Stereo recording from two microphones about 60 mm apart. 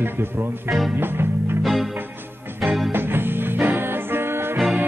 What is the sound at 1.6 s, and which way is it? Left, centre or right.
Music, centre.